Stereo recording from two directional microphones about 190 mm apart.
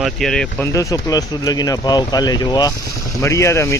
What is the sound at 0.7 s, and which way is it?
Speech, 15° left (ahead or behind).